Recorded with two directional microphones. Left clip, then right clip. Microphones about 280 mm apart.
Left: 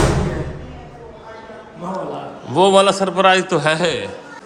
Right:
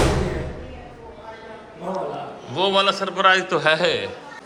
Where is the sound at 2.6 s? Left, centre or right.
Centre.